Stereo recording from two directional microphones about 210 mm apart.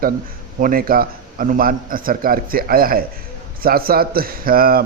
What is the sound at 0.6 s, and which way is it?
Speech, 45° right (ahead or behind).